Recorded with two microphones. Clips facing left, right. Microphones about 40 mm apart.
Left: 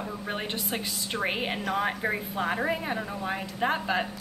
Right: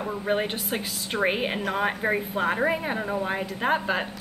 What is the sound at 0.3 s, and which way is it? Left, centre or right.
A woman's voice, centre.